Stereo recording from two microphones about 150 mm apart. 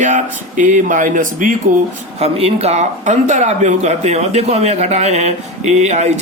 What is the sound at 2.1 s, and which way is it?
Speech, 45° right (ahead or behind).